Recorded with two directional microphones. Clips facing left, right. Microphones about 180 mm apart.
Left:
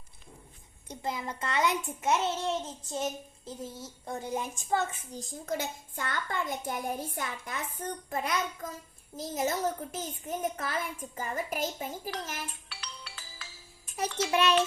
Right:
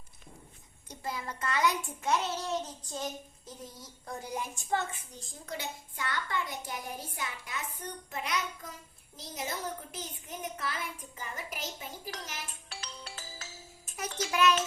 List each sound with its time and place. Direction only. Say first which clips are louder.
0.9 s a child's voice: left 3 dB; 25° left (ahead or behind)
5.1 s a child's voice: left 7 dB; 40° left (ahead or behind)
12.6 s ringtone: right 2 dB; 45° right (ahead or behind)
14.2 s a child's voice: even; 30° left (ahead or behind)